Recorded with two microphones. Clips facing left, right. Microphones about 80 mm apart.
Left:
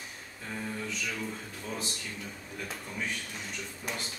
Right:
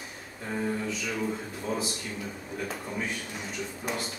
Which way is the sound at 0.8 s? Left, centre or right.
Centre.